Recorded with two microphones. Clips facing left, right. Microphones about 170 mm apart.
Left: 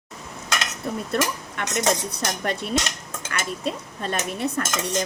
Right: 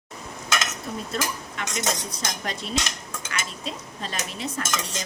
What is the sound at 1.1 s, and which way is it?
Cutlery, 60° left (ahead or behind).